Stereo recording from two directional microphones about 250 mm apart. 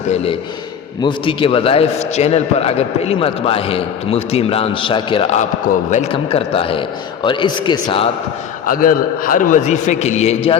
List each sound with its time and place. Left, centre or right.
1.0 s a man's voice: centre
8.6 s a man's voice: left